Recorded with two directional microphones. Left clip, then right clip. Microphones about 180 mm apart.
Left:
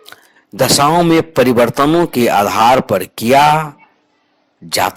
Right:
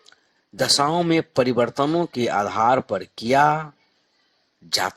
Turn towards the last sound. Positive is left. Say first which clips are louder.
# left 8 dB
turn(degrees=40)  # may be behind; listen again after turning